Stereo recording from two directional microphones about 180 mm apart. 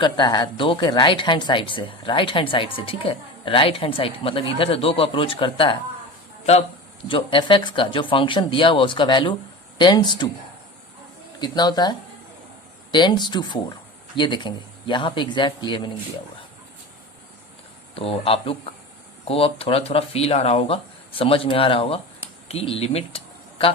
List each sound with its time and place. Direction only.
0.0 s a woman's voice: 25° left (ahead or behind)
11.3 s a woman's voice: 25° left (ahead or behind)
17.9 s speech: 30° left (ahead or behind)